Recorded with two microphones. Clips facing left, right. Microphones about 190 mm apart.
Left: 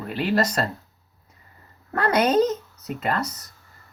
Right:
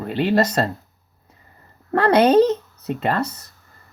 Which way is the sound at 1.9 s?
30° right (ahead or behind).